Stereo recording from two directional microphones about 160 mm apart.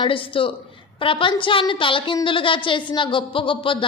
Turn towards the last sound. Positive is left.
turn(degrees=30)  # may be behind; listen again after turning